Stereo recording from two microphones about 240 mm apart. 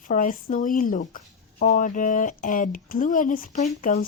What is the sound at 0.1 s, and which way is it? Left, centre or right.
Speech, left.